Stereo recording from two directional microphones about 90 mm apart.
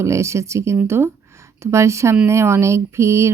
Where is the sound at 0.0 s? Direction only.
35° right (ahead or behind).